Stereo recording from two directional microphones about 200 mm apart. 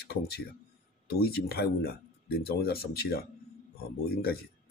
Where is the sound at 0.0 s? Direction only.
55° left (ahead or behind).